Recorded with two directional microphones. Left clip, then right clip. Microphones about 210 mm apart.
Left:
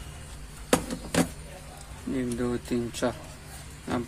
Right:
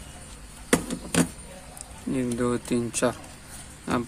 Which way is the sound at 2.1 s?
30° right (ahead or behind).